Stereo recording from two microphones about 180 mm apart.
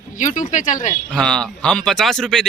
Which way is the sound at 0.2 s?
45° left (ahead or behind).